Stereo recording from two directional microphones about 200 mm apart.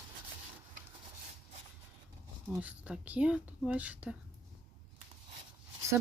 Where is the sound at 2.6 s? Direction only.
5° right (ahead or behind).